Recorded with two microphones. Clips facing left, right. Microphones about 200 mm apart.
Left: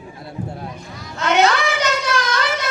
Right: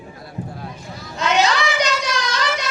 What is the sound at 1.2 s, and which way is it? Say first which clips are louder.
Children playing: left 2 dB; 60° left (ahead or behind).